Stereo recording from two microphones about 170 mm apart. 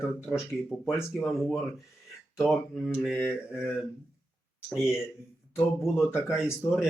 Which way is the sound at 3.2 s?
10° left (ahead or behind).